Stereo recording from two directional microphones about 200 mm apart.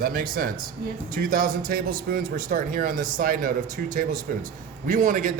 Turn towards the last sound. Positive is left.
turn(degrees=-40)  # may be behind; listen again after turning